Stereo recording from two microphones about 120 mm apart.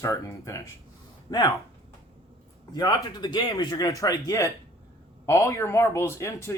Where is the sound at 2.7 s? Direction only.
35° left (ahead or behind).